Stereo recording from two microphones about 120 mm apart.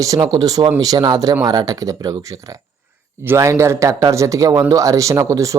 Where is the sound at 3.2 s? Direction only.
20° right (ahead or behind).